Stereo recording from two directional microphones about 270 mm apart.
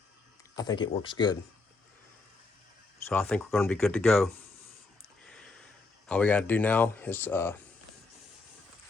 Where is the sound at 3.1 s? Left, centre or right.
Centre.